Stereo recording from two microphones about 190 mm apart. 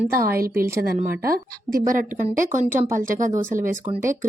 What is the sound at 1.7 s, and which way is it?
A woman's voice, 45° right (ahead or behind).